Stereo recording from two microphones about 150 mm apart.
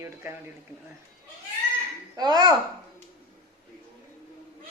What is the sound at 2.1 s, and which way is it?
Speech, 25° right (ahead or behind).